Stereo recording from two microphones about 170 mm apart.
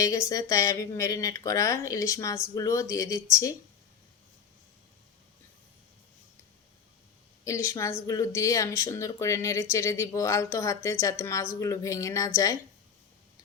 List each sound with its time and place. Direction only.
0.0 s speech: 20° left (ahead or behind)
7.4 s a woman's voice: 20° left (ahead or behind)